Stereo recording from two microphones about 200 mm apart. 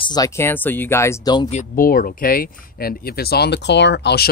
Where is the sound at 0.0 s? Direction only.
20° left (ahead or behind).